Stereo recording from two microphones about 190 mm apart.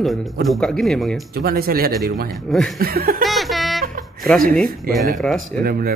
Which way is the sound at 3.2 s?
Centre (ahead or behind).